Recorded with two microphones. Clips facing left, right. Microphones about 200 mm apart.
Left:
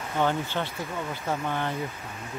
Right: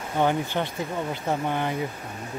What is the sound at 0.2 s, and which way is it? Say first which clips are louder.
Speech: right 3 dB; 15° right (ahead or behind).